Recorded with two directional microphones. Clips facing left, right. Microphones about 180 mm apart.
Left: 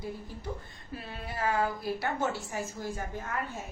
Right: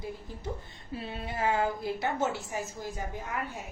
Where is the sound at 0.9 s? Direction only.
25° right (ahead or behind).